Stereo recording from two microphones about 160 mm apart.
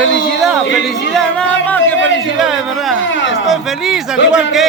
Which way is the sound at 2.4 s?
5° right (ahead or behind).